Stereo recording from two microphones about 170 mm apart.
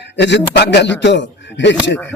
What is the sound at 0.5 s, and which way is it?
A man's voice, 75° left (ahead or behind).